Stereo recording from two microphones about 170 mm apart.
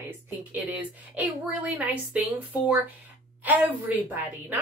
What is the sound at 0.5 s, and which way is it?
A woman's voice, 10° right (ahead or behind).